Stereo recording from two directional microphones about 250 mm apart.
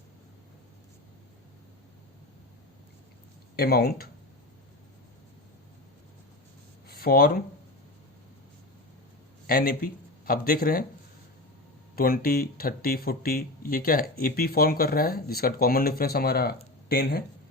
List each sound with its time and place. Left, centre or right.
3.5 s speech: left
6.8 s speech: left
9.5 s speech: left
11.9 s speech: left